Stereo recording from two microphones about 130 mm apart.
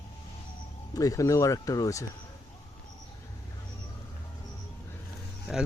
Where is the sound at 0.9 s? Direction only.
25° left (ahead or behind).